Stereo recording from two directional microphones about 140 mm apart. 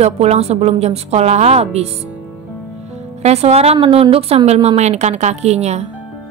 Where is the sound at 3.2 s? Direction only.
50° right (ahead or behind).